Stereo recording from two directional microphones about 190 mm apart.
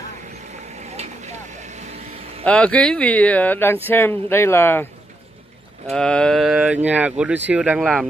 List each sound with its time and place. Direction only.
0.9 s vehicle: 35° right (ahead or behind)
2.4 s speech: 5° left (ahead or behind)
5.9 s speech: 5° left (ahead or behind)